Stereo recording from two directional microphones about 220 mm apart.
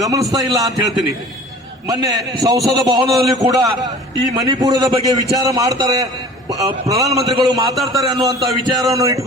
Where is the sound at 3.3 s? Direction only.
15° right (ahead or behind).